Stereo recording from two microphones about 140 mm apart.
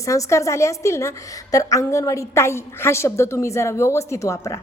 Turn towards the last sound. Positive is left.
turn(degrees=25)  # may be behind; listen again after turning